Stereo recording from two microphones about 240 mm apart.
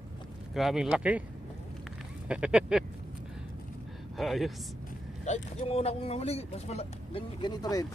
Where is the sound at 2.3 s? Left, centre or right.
Centre.